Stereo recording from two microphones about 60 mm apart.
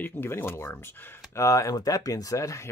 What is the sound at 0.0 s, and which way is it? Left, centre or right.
Speech, left.